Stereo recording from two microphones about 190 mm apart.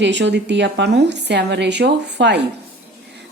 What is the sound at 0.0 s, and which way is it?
A woman's voice, 70° right (ahead or behind).